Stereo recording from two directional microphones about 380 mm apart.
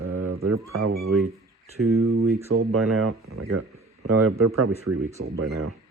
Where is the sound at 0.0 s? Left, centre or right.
Right.